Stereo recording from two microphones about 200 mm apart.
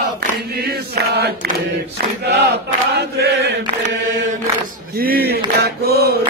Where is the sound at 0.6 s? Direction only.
55° right (ahead or behind).